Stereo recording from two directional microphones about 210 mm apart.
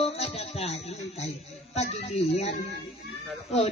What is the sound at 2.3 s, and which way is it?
Speech, 30° left (ahead or behind).